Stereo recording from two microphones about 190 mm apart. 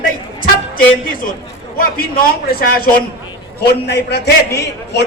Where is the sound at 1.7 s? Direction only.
50° left (ahead or behind).